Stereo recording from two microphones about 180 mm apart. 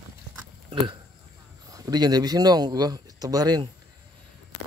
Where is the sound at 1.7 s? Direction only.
20° right (ahead or behind).